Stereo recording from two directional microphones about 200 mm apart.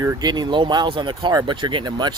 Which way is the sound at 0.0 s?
15° right (ahead or behind).